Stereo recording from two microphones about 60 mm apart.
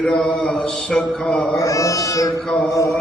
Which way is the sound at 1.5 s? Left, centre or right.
Left.